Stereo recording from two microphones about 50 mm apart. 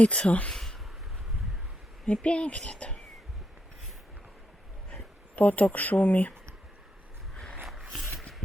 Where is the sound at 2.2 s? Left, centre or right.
Left.